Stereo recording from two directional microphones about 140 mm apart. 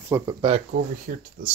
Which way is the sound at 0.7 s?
75° right (ahead or behind).